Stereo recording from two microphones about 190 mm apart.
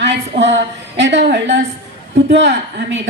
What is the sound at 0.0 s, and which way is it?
A woman's voice, 65° right (ahead or behind).